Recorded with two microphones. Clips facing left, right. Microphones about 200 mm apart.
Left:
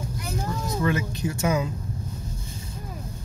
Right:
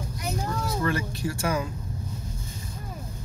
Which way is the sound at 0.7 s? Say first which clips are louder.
Left 4 dB; 20° left (ahead or behind).